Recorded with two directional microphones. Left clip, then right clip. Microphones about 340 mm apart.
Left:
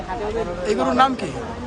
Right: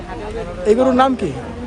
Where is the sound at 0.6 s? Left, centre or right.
Centre.